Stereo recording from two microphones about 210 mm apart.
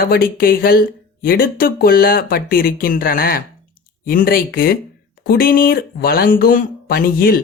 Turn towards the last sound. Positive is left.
turn(degrees=45)  # may be behind; listen again after turning